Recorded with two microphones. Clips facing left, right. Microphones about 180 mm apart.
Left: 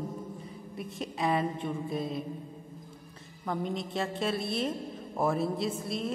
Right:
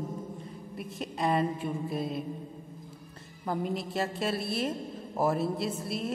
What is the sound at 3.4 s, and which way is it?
A woman's voice, 5° right (ahead or behind).